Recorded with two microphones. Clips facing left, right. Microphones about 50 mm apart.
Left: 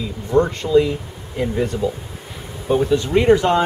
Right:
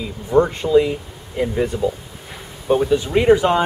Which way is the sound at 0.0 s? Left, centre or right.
Centre.